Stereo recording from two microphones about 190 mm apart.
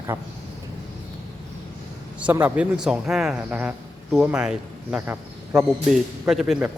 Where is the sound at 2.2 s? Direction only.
10° right (ahead or behind).